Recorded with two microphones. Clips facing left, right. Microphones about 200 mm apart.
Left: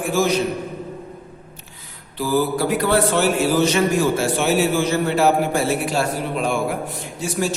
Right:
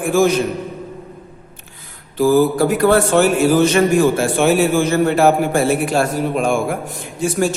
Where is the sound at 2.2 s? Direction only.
45° right (ahead or behind).